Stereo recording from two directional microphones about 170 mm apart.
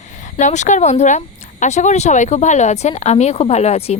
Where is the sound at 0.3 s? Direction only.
45° left (ahead or behind).